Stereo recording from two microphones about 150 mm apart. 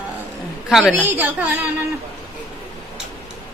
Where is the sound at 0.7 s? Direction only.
Centre (ahead or behind).